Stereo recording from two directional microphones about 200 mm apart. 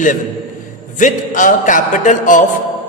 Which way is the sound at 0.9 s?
40° left (ahead or behind).